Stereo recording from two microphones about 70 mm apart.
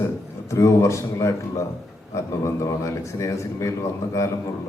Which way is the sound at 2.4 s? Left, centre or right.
Left.